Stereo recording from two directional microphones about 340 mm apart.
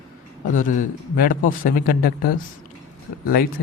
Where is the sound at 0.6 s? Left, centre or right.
Left.